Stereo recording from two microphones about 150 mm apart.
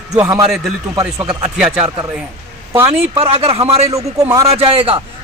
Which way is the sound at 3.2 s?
40° right (ahead or behind).